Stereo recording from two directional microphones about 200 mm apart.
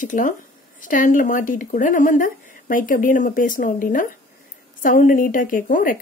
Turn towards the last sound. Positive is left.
turn(degrees=45)  # may be behind; listen again after turning